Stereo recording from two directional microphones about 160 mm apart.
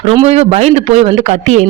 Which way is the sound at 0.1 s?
35° right (ahead or behind).